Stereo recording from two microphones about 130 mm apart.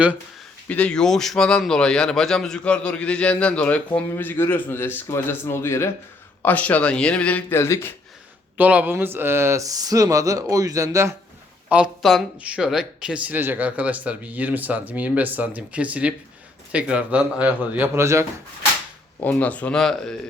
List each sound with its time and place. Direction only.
0.7 s a man's voice: 10° left (ahead or behind)
8.5 s speech: 15° right (ahead or behind)
11.7 s speech: 5° right (ahead or behind)
17.7 s speech: 20° right (ahead or behind)
19.2 s a man's voice: 10° left (ahead or behind)